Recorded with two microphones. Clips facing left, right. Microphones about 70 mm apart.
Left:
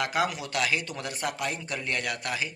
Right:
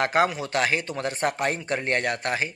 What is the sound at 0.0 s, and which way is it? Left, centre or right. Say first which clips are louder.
Speech: right 5 dB; right.